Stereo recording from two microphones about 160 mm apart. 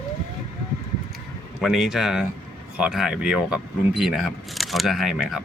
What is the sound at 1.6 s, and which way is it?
Speech, 5° right (ahead or behind).